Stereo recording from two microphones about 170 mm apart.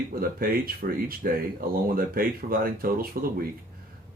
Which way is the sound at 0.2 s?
60° right (ahead or behind).